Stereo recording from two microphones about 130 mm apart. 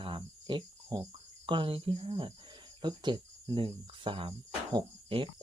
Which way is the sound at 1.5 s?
40° right (ahead or behind).